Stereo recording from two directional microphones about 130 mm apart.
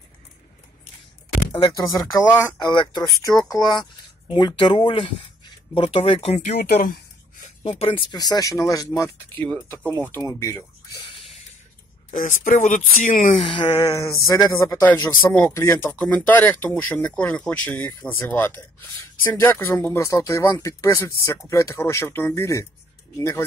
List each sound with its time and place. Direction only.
1.5 s speech: 30° left (ahead or behind)
2.6 s speech: 35° left (ahead or behind); by 7.5 s 85° left
7.6 s speech: 45° left (ahead or behind)
8.2 s speech: 30° left (ahead or behind)
9.3 s speech: 15° left (ahead or behind)
12.1 s speech: 90° left
13.5 s a sound: 35° left (ahead or behind)
14.2 s speech: 25° left (ahead or behind)